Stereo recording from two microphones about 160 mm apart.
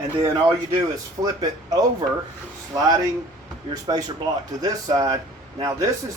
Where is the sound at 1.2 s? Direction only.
25° right (ahead or behind).